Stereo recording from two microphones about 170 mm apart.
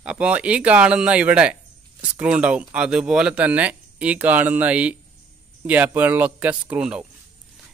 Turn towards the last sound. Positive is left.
turn(degrees=-5)  # may be behind; listen again after turning